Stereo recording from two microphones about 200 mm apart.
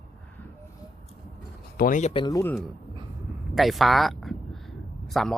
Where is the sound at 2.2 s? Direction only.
15° left (ahead or behind).